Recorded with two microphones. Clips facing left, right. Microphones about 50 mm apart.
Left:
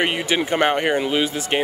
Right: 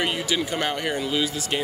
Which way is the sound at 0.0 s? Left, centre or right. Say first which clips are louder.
Left 4 dB; left.